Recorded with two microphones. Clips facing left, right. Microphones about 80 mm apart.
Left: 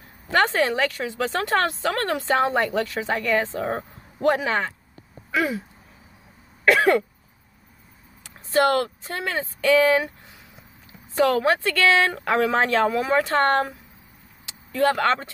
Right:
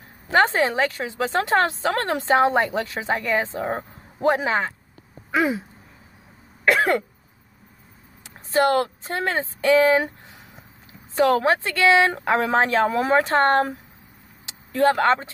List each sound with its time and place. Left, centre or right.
0.3 s a woman's voice: right
5.3 s a sound: right
6.6 s cough: centre
8.5 s a woman's voice: right
11.1 s a woman's voice: right
12.1 s a woman's voice: right
14.4 s vehicle: right